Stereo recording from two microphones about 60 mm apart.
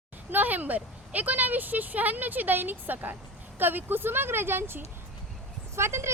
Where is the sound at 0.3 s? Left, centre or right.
Right.